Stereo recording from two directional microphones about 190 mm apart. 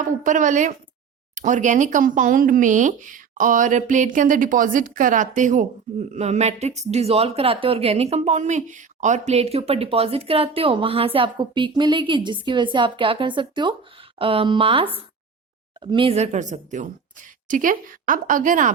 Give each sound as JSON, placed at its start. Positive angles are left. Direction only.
{"t": 0.2, "sound": "speech", "side_deg": -40}